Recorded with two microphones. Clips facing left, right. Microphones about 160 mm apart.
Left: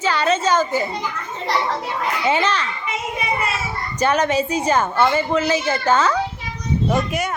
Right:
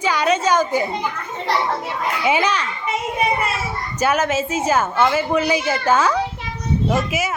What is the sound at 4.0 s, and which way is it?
A woman's voice, 5° right (ahead or behind).